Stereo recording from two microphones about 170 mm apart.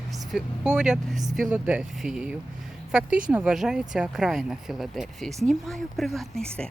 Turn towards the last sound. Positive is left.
turn(degrees=0)  # may be behind; listen again after turning